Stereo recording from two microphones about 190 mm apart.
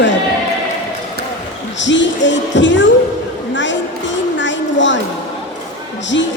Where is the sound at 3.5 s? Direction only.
70° left (ahead or behind).